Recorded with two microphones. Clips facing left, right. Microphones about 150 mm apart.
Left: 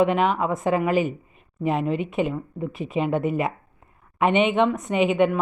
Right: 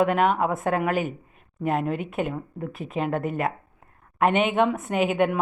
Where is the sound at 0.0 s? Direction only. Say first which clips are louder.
Left 1 dB; centre (ahead or behind).